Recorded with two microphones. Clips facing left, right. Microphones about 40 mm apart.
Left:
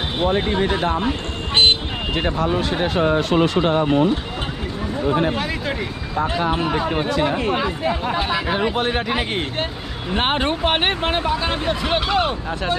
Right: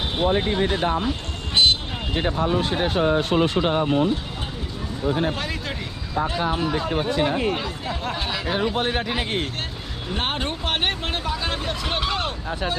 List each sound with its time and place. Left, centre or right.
2.8 s speech: left
6.5 s speech: left; by 9.4 s centre
10.1 s speech: left; by 12.7 s centre